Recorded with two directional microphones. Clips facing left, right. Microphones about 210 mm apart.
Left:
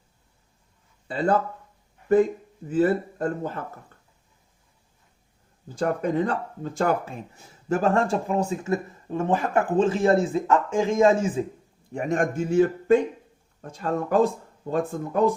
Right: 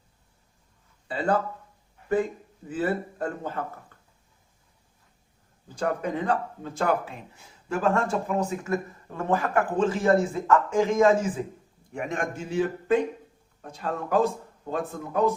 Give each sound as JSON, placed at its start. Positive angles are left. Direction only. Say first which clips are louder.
{"t": 1.0, "sound": "speech", "louder": "left 3 dB", "side_deg": 40}
{"t": 2.6, "sound": "speech", "louder": "left 6 dB", "side_deg": 40}
{"t": 5.8, "sound": "speech", "louder": "left 4 dB", "side_deg": 40}
{"t": 11.9, "sound": "speech", "louder": "left 6 dB", "side_deg": 40}